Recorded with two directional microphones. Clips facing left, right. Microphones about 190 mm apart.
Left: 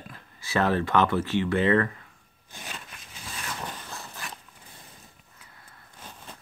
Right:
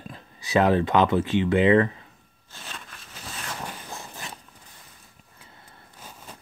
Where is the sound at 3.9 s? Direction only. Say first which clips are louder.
Right 2 dB; 20° right (ahead or behind).